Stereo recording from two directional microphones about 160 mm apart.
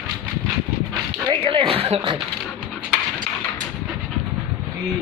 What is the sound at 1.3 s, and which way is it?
Speech, 35° right (ahead or behind).